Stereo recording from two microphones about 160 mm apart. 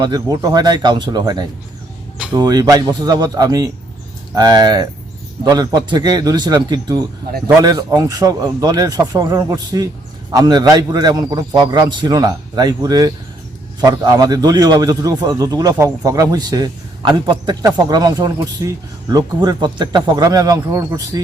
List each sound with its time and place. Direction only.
0.0 s a man's voice: 25° right (ahead or behind)